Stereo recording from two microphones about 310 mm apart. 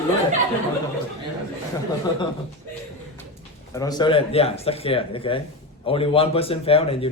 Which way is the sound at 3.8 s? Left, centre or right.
Centre.